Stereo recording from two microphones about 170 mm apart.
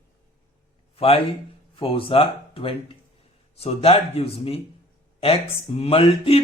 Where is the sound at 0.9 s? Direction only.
35° left (ahead or behind).